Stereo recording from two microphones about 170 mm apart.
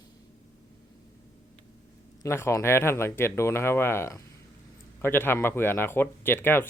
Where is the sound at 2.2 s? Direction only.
15° left (ahead or behind).